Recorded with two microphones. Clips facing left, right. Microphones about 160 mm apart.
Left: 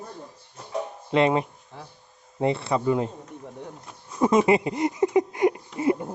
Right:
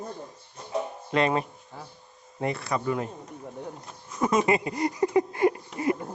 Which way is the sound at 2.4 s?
25° left (ahead or behind).